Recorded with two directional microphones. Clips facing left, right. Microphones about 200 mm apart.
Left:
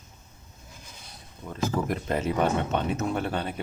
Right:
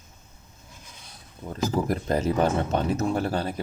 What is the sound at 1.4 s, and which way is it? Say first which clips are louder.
Speech: right 2 dB; 35° right (ahead or behind).